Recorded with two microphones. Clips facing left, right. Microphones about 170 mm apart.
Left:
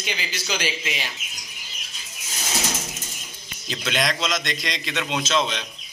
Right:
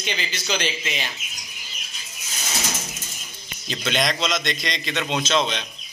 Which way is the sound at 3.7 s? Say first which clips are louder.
Right 1 dB; centre (ahead or behind).